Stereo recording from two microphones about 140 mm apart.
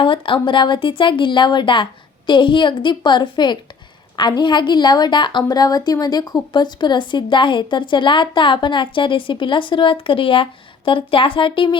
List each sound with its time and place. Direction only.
0.0 s a woman's voice: 40° left (ahead or behind)